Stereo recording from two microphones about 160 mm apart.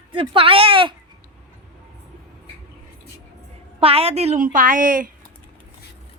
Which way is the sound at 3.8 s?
35° right (ahead or behind).